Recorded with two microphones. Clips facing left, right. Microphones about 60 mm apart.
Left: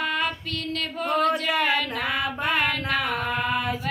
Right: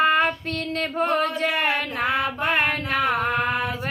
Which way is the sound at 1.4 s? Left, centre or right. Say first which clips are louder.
Right 1 dB; right.